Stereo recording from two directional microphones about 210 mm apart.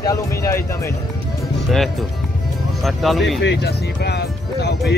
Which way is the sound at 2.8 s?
Centre (ahead or behind).